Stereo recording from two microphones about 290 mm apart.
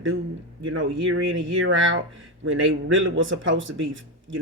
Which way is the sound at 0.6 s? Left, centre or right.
Right.